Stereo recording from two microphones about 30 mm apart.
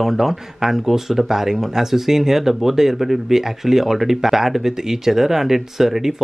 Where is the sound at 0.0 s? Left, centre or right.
Centre.